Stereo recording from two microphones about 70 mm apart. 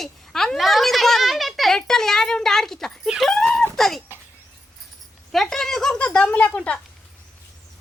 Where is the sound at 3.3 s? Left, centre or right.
Centre.